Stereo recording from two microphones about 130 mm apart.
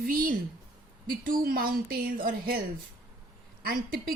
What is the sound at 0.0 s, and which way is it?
A woman's voice, 90° right.